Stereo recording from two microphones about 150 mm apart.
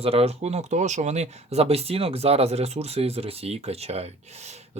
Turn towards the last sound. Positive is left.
turn(degrees=-45)  # may be behind; listen again after turning